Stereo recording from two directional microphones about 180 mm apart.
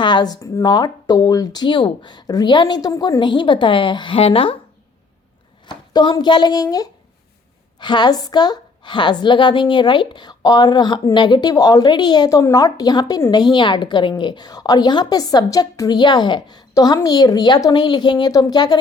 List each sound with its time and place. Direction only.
0.0 s a woman's voice: 25° left (ahead or behind)
5.6 s a woman's voice: 25° left (ahead or behind)